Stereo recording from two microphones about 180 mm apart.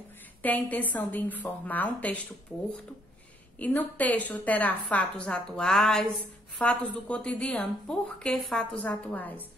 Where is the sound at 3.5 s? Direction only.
10° left (ahead or behind).